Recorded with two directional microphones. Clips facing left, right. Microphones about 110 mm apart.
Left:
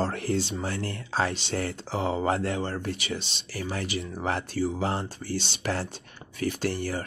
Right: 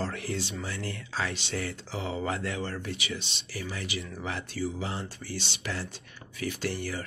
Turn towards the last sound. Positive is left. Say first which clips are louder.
# left 4 dB
turn(degrees=35)  # may be behind; listen again after turning